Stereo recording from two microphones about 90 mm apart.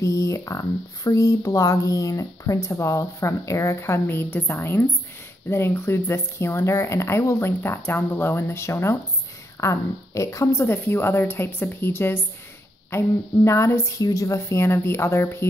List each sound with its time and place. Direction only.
0.0 s speech: 35° left (ahead or behind)